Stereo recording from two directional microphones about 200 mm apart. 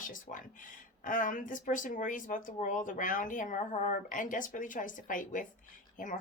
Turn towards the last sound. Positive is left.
turn(degrees=40)  # may be behind; listen again after turning